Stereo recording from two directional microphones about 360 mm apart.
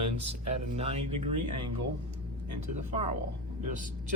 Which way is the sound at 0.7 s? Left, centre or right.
Centre.